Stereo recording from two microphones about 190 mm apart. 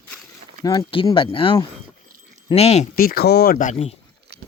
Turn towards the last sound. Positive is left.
turn(degrees=35)  # may be behind; listen again after turning